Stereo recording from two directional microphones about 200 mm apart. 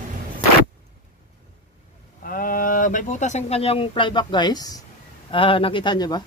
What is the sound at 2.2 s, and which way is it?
Speech, 45° left (ahead or behind).